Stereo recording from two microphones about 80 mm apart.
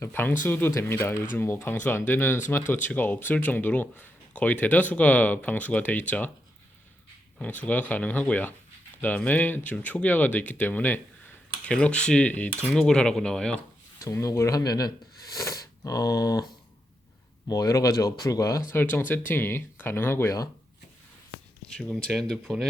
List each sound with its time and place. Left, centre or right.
0.0 s speech: left
7.4 s speech: left
14.0 s speech: left
14.6 s speech: left
17.5 s speech: left
18.7 s speech: left
21.7 s speech: centre